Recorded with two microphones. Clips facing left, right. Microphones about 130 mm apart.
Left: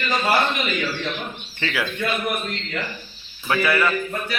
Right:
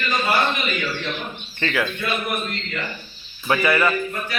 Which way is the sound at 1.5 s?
10° left (ahead or behind).